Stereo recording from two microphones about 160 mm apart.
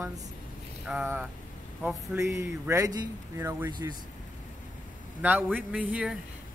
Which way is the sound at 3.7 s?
25° right (ahead or behind).